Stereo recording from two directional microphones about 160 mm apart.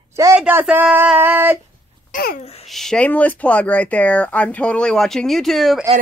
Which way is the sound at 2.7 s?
Centre (ahead or behind).